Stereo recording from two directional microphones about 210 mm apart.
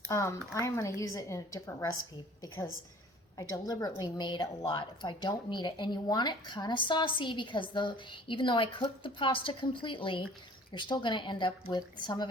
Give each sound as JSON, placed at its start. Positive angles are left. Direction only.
{"t": 0.1, "sound": "a woman's voice", "side_deg": 15}
{"t": 3.5, "sound": "a woman's voice", "side_deg": 15}